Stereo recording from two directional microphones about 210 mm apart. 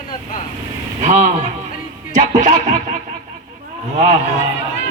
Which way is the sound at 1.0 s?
35° right (ahead or behind).